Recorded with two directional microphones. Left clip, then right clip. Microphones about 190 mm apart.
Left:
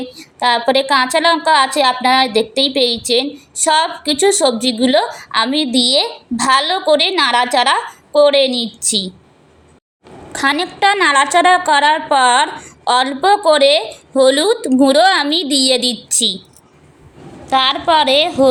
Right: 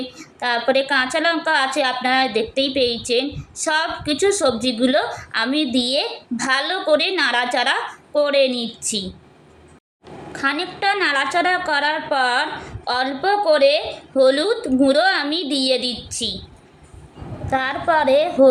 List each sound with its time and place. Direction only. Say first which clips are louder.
0.2 s a woman's voice: left 7 dB; 30° left (ahead or behind)
10.3 s a woman's voice: left 6 dB; 45° left (ahead or behind)
17.4 s a woman's voice: left 7 dB; 30° left (ahead or behind)